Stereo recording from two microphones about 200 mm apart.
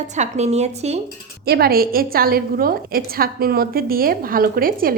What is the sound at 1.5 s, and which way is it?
A woman's voice, 50° right (ahead or behind).